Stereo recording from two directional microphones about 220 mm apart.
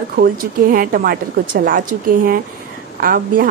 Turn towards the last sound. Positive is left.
turn(degrees=-40)  # may be behind; listen again after turning